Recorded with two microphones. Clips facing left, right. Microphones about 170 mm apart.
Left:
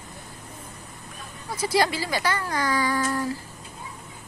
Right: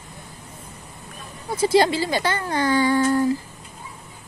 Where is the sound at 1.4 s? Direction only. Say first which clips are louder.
Right 6 dB; 25° right (ahead or behind).